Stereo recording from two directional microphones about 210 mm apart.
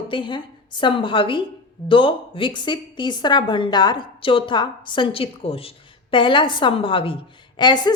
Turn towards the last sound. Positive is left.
turn(degrees=20)  # may be behind; listen again after turning